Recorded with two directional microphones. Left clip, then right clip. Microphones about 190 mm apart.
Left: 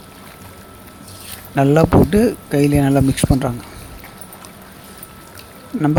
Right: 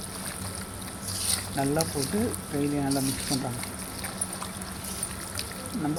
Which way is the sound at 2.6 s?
60° left (ahead or behind).